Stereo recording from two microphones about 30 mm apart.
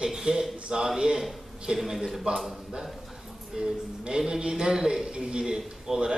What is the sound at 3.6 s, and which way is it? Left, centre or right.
Speech, right.